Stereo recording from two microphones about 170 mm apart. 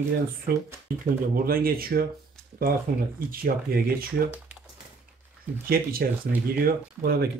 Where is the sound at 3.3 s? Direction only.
60° right (ahead or behind).